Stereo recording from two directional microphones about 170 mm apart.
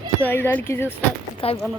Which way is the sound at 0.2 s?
10° left (ahead or behind).